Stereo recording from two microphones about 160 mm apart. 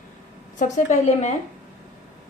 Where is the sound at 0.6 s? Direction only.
50° left (ahead or behind).